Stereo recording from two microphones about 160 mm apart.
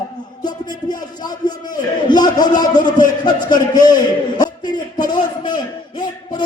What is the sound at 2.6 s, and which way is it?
A man's voice, 25° left (ahead or behind).